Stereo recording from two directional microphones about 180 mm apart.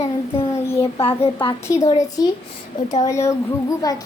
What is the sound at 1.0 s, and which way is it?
Speech, 30° left (ahead or behind).